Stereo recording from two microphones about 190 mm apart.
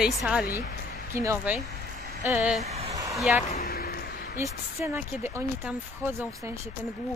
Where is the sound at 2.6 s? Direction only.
35° right (ahead or behind).